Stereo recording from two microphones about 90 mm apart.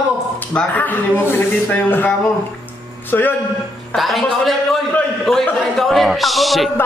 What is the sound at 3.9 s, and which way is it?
Speech, centre (ahead or behind).